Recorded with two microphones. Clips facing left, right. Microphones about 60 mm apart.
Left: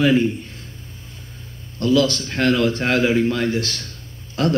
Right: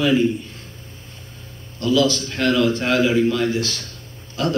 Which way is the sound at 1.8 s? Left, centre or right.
Left.